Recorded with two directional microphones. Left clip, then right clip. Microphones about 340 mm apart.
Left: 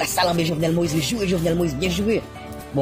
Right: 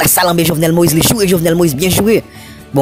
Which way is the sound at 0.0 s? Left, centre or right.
Right.